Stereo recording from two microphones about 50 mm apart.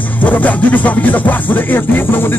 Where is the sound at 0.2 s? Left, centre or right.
Left.